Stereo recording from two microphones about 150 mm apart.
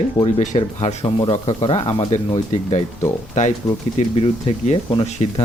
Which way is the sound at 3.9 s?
40° left (ahead or behind).